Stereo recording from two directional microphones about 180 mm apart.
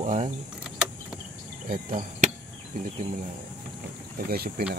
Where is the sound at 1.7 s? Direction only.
45° right (ahead or behind).